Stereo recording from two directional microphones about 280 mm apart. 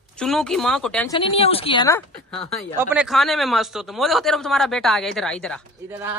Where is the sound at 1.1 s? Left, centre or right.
Centre.